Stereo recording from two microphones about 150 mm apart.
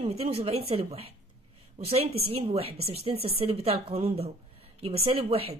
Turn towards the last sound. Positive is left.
turn(degrees=-40)  # may be behind; listen again after turning